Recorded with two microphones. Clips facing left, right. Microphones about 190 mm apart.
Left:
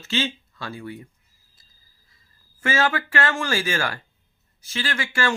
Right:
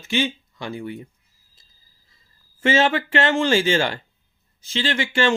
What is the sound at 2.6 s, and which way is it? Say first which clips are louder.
Speech: right 4 dB; 25° right (ahead or behind).